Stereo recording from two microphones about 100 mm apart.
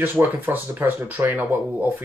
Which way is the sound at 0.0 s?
20° right (ahead or behind).